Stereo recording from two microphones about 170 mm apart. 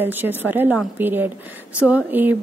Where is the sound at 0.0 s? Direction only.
10° right (ahead or behind).